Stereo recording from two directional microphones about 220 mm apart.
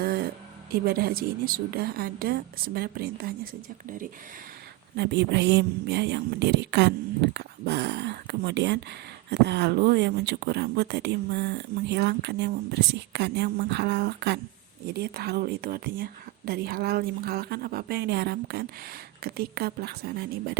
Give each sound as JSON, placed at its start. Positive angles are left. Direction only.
{"t": 0.0, "sound": "a sound", "side_deg": -45}
{"t": 0.7, "sound": "speech", "side_deg": -45}
{"t": 4.9, "sound": "speech", "side_deg": -50}